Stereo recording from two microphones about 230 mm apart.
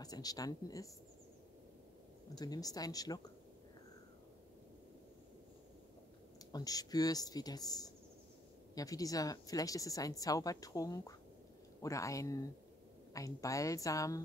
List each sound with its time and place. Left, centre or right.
0.0 s speech: centre
2.3 s speech: centre
6.5 s speech: centre